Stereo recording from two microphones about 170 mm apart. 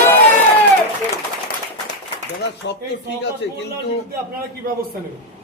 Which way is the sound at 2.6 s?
90° left.